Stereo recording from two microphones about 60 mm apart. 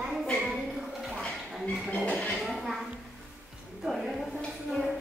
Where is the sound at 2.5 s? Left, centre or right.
Centre.